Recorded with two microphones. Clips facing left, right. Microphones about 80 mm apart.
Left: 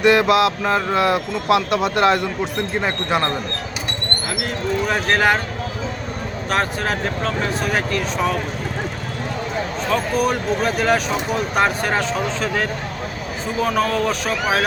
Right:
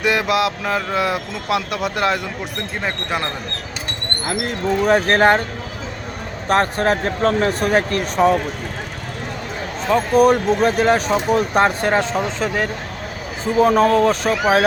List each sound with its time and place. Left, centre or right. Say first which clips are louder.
0.0 s speech: left 4 dB; centre
4.3 s speech: right 4 dB; right
6.5 s speech: right 5 dB; right
10.2 s speech: right 6 dB; right
11.9 s speech: right 2 dB; right
13.6 s speech: right 6 dB; right